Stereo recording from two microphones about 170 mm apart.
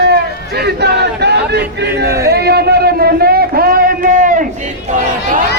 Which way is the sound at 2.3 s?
70° right (ahead or behind).